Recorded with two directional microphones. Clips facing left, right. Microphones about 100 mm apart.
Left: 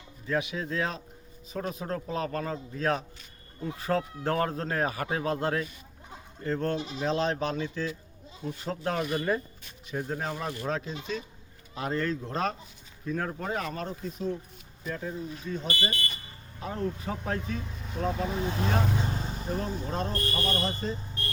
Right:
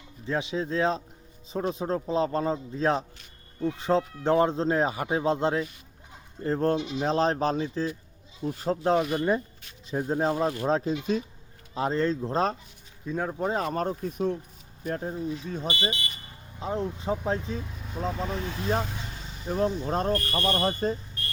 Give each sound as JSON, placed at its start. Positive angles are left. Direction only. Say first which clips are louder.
{"t": 0.3, "sound": "speech", "louder": "right 2 dB", "side_deg": -30}
{"t": 6.4, "sound": "speech", "louder": "right 4 dB", "side_deg": -35}
{"t": 9.0, "sound": "speech", "louder": "right 4 dB", "side_deg": -5}
{"t": 9.9, "sound": "speech", "louder": "right 7 dB", "side_deg": -30}
{"t": 13.1, "sound": "speech", "louder": "right 3 dB", "side_deg": -20}
{"t": 13.6, "sound": "speech", "louder": "right 6 dB", "side_deg": -35}
{"t": 15.6, "sound": "speech", "louder": "right 2 dB", "side_deg": -20}
{"t": 17.7, "sound": "speech", "louder": "left 1 dB", "side_deg": 0}
{"t": 18.4, "sound": "speech", "louder": "even", "side_deg": 40}
{"t": 19.5, "sound": "speech", "louder": "right 7 dB", "side_deg": -40}